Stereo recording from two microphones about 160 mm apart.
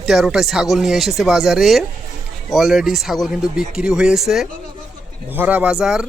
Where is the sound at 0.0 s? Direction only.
Centre (ahead or behind).